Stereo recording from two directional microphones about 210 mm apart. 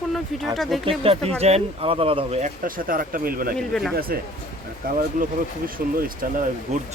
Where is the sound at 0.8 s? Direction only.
25° right (ahead or behind); by 3.5 s 45° right (ahead or behind).